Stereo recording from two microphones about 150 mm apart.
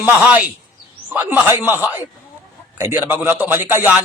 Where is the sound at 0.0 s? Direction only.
10° right (ahead or behind).